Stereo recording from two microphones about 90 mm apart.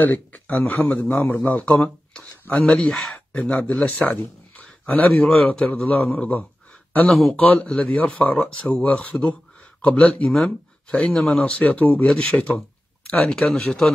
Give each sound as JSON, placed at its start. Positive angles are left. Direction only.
{"t": 0.0, "sound": "speech", "side_deg": 20}
{"t": 4.6, "sound": "a sound", "side_deg": 15}
{"t": 5.5, "sound": "speech", "side_deg": 10}
{"t": 6.9, "sound": "speech", "side_deg": 20}
{"t": 11.6, "sound": "speech", "side_deg": 15}